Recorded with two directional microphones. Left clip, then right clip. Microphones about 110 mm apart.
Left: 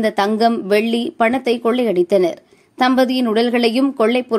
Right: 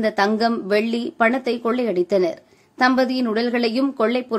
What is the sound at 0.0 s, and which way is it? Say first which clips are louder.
A woman's voice: left 3 dB; 30° left (ahead or behind).